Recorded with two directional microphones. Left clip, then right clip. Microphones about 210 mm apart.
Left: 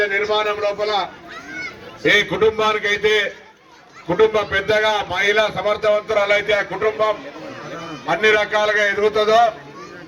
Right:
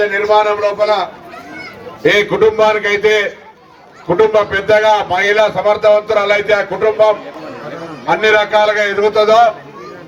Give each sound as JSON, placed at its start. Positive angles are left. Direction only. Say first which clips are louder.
{"t": 0.1, "sound": "a man's voice", "louder": "right 7 dB", "side_deg": -55}
{"t": 0.8, "sound": "a man's voice", "louder": "right 7 dB", "side_deg": -5}
{"t": 2.0, "sound": "a man's voice", "louder": "right 5 dB", "side_deg": -50}